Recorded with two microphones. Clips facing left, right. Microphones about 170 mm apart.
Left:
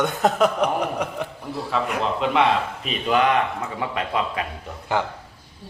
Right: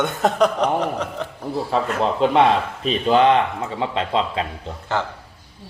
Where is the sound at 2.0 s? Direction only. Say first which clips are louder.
Right 5 dB; 35° right (ahead or behind).